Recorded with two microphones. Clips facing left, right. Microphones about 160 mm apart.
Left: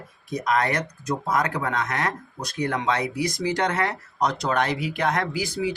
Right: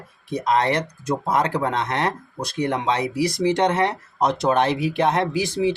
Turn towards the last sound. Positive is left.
turn(degrees=-25)  # may be behind; listen again after turning